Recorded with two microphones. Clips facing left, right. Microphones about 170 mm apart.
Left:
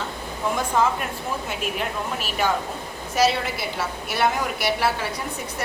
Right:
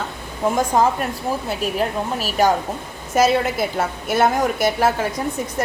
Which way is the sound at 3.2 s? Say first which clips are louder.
Right 5 dB; 50° right (ahead or behind).